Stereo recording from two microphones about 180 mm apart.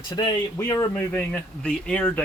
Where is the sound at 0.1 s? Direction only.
25° left (ahead or behind).